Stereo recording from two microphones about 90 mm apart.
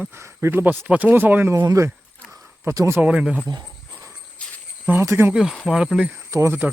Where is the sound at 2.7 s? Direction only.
35° right (ahead or behind).